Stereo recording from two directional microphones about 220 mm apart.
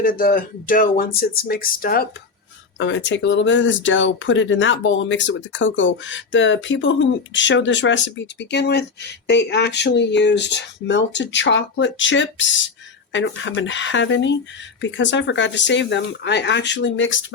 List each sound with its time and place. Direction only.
0.0 s speech: 40° left (ahead or behind)
2.7 s speech: 55° left (ahead or behind)